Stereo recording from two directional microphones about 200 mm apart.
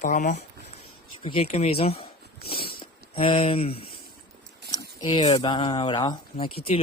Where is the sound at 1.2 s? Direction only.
30° left (ahead or behind).